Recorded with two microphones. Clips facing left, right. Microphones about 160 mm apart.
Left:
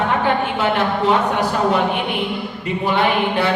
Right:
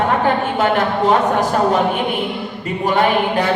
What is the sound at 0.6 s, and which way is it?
Speech, 45° right (ahead or behind).